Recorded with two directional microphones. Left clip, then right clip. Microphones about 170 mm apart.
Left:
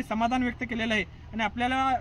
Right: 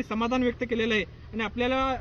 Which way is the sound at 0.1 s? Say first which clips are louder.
Even; 15° left (ahead or behind).